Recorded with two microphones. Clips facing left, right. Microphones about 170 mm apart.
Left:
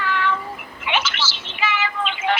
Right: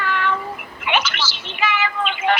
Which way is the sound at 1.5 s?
55° right (ahead or behind).